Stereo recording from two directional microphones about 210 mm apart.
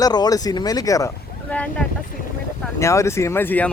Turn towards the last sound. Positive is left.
turn(degrees=10)  # may be behind; listen again after turning